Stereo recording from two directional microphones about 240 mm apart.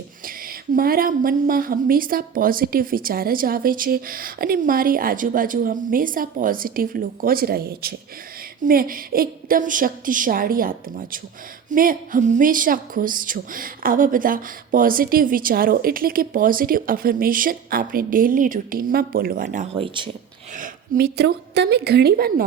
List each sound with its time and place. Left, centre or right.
0.3 s a woman's voice: right
20.6 s a woman's voice: right